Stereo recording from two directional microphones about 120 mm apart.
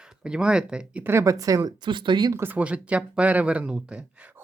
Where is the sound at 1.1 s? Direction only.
25° right (ahead or behind).